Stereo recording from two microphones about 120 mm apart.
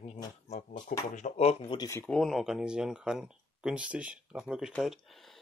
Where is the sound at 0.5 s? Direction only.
90° left.